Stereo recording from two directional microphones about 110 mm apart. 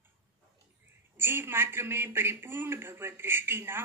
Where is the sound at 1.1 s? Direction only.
20° right (ahead or behind).